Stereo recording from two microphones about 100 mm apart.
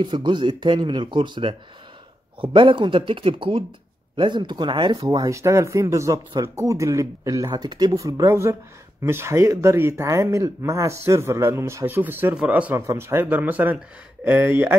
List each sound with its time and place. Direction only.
0.0 s a man's voice: 50° right (ahead or behind); by 12.7 s 15° right (ahead or behind)
12.7 s speech: 25° right (ahead or behind)